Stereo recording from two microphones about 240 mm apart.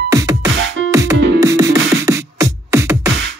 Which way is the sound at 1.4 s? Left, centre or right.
Centre.